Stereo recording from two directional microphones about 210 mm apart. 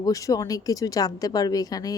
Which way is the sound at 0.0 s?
15° left (ahead or behind).